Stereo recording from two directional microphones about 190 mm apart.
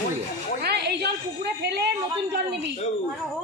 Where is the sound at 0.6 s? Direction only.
60° right (ahead or behind).